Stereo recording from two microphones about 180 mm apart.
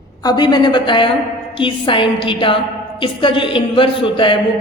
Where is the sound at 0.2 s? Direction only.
20° left (ahead or behind).